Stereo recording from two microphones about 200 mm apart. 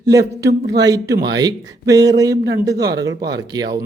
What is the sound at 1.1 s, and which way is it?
Speech, 55° right (ahead or behind).